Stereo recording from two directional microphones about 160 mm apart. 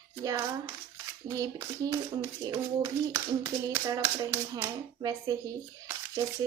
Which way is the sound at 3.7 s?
20° right (ahead or behind).